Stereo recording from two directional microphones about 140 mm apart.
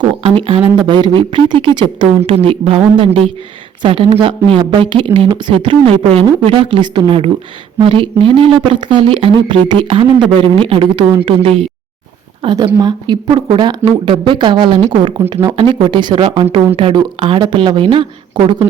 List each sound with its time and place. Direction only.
0.0 s a sound: 40° right (ahead or behind)
0.8 s speech: 35° right (ahead or behind)
12.5 s speech: 30° right (ahead or behind)